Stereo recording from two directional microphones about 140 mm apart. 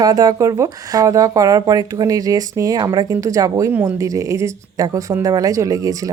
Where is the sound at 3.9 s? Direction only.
25° right (ahead or behind).